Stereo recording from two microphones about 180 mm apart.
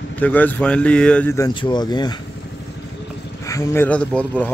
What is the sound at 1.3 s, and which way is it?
Speech, 20° left (ahead or behind).